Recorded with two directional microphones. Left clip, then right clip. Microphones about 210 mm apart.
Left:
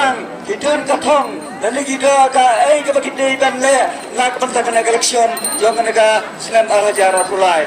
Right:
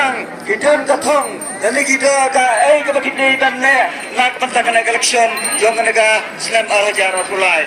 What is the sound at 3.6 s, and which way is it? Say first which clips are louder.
A man's voice: even; 45° left (ahead or behind).